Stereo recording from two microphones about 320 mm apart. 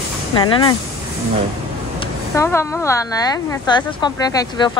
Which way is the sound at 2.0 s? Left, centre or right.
Centre.